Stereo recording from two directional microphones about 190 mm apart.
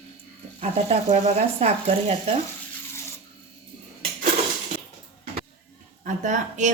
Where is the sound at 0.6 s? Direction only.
35° right (ahead or behind).